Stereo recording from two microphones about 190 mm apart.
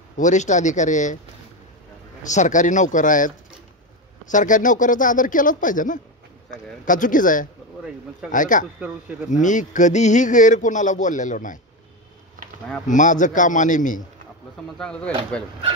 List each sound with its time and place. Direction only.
0.2 s speech: 40° left (ahead or behind)
2.2 s speech: 40° left (ahead or behind)
12.8 s speech: 40° left (ahead or behind)
14.8 s speech: 5° left (ahead or behind)